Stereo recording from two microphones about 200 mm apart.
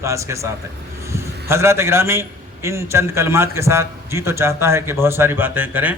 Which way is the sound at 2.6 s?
15° right (ahead or behind).